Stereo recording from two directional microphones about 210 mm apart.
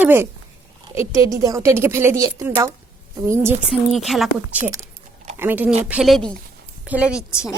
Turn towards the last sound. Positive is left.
turn(degrees=-5)  # may be behind; listen again after turning